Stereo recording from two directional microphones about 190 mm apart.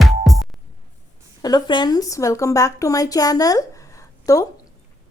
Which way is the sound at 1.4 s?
20° left (ahead or behind).